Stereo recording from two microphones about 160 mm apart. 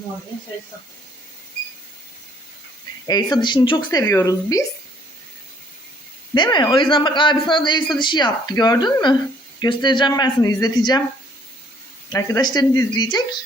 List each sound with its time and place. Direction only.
3.1 s a man's voice: 25° left (ahead or behind)
6.3 s a man's voice: 30° left (ahead or behind)
12.0 s a man's voice: 25° left (ahead or behind)